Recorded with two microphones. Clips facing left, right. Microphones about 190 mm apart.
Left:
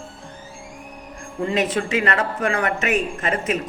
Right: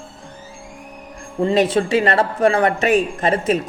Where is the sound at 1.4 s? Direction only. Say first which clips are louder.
Right 6 dB; 35° right (ahead or behind).